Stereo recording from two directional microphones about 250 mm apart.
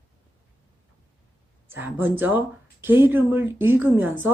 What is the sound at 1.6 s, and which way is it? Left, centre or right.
Speech, centre.